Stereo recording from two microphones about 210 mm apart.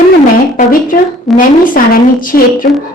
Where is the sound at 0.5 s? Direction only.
40° left (ahead or behind).